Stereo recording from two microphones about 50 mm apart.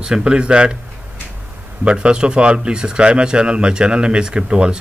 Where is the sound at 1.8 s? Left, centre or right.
Centre.